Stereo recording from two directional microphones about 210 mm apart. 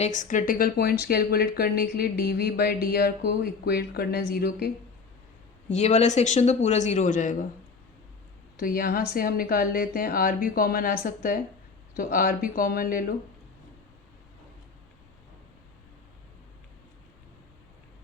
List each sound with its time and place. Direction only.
0.0 s speech: 35° left (ahead or behind)
5.6 s speech: 30° left (ahead or behind)
8.5 s speech: 45° left (ahead or behind)